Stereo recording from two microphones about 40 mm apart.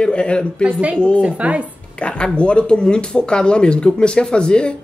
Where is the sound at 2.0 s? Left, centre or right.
Left.